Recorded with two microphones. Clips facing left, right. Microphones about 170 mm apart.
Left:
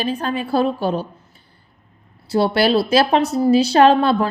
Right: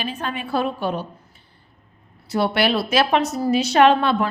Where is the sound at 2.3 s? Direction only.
30° left (ahead or behind).